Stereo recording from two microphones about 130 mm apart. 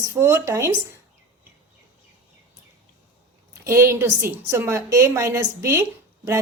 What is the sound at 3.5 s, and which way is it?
A woman's voice, 20° right (ahead or behind).